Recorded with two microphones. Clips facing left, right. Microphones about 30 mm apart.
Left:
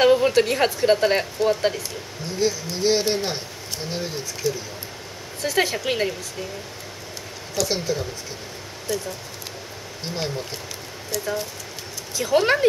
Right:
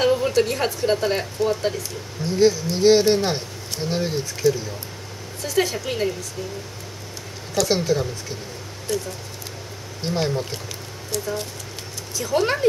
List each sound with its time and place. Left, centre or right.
0.0 s a woman's voice: centre
2.3 s speech: centre
5.4 s speech: centre
7.5 s speech: centre
12.2 s speech: centre